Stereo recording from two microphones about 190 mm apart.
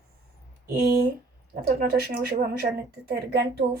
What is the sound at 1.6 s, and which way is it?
A woman's voice, 55° right (ahead or behind).